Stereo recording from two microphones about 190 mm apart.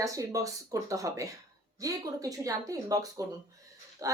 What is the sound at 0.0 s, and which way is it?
Speech, 15° right (ahead or behind).